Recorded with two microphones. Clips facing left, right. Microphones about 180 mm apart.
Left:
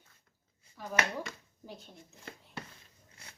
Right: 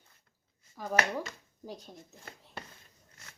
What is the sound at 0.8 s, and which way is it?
Speech, 45° right (ahead or behind).